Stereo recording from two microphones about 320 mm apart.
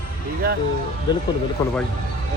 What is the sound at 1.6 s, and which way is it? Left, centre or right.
Speech, centre.